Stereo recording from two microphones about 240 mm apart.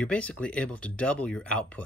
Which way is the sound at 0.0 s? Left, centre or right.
Centre.